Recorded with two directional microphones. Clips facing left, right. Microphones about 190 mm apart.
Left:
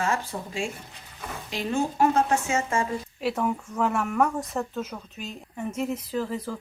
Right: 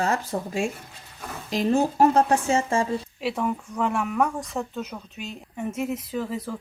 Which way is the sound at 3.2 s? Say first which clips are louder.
Left 2 dB; centre (ahead or behind).